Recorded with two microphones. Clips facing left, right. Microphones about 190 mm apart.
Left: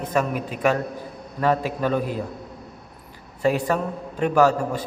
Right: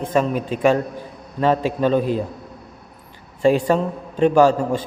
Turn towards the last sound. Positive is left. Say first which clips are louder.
# right 4 dB
turn(degrees=-25)  # may be behind; listen again after turning